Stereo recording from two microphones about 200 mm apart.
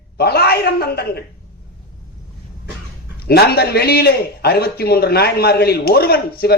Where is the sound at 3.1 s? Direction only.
50° left (ahead or behind).